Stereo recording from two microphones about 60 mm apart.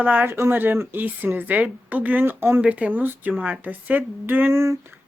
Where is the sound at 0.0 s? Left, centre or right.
Right.